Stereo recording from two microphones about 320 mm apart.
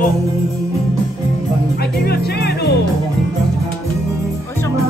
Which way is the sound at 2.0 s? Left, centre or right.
Left.